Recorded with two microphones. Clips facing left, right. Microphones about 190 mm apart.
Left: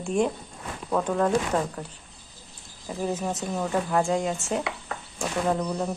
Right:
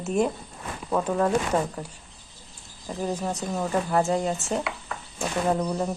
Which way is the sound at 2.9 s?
5° left (ahead or behind).